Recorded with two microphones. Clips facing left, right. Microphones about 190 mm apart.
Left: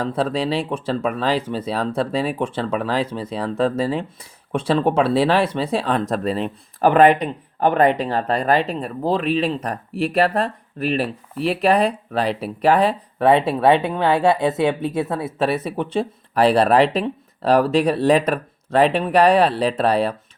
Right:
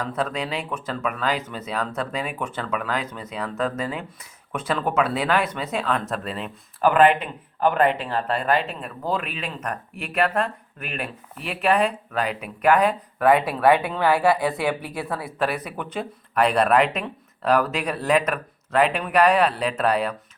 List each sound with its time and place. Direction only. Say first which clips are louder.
0.0 s speech: left 5 dB; 30° left (ahead or behind)